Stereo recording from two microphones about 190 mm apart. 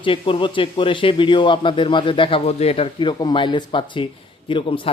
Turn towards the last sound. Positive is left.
turn(degrees=25)  # may be behind; listen again after turning